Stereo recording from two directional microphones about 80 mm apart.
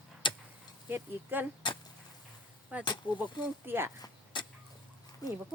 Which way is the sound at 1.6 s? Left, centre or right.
Left.